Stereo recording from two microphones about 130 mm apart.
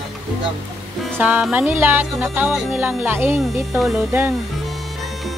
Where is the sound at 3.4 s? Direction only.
Centre (ahead or behind).